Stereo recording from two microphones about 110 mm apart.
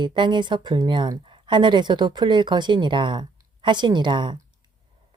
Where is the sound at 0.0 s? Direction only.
45° right (ahead or behind).